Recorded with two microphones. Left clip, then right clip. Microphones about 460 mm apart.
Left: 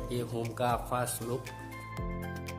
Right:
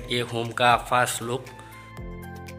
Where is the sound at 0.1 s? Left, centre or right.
Left.